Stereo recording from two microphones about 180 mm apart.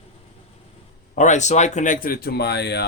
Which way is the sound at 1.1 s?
40° left (ahead or behind).